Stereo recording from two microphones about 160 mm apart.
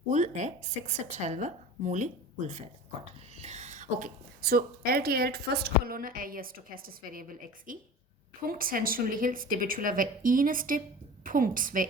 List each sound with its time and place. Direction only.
0.1 s speech: 50° right (ahead or behind)
3.4 s a woman's voice: 45° right (ahead or behind)